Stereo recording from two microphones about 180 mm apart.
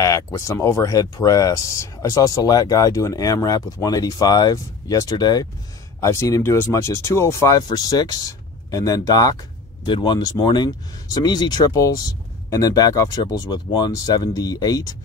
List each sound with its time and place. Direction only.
0.0 s speech: 15° left (ahead or behind)